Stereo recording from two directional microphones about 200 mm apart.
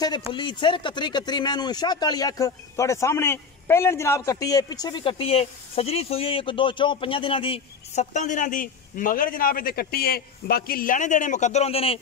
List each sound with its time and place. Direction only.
0.3 s speech: 25° left (ahead or behind)